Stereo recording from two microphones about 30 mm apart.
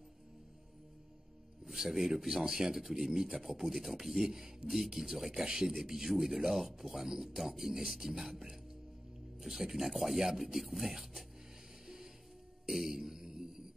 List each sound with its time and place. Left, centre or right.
1.6 s music: centre
2.1 s a man's voice: centre
11.8 s music: centre
12.6 s mantra: centre